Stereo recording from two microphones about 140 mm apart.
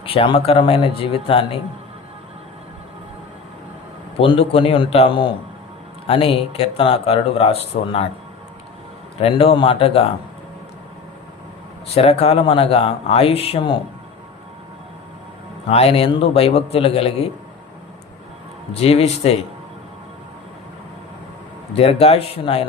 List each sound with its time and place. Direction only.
0.0 s speech: 40° left (ahead or behind)
4.2 s speech: 40° left (ahead or behind)
9.1 s speech: 40° left (ahead or behind)
11.9 s speech: 45° left (ahead or behind)
15.7 s speech: 45° left (ahead or behind)
18.7 s speech: 45° left (ahead or behind)
21.7 s speech: 45° left (ahead or behind)